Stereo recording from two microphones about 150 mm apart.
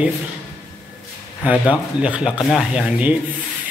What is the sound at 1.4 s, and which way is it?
Speech, 10° right (ahead or behind).